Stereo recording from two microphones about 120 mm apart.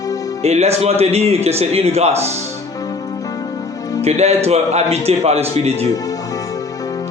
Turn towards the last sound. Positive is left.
turn(degrees=-60)  # may be behind; listen again after turning